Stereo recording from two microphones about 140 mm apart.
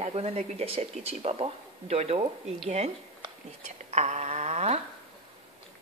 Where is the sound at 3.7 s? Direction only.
55° right (ahead or behind).